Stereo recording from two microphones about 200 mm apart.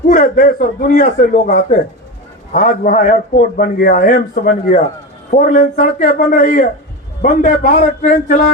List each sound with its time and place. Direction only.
0.1 s a man's voice: 45° left (ahead or behind)